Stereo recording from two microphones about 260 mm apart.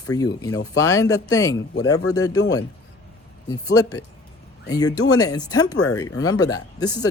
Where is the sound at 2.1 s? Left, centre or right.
Centre.